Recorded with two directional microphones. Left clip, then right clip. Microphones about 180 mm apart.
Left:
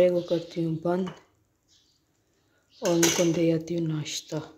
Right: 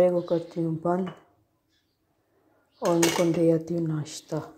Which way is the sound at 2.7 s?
10° left (ahead or behind).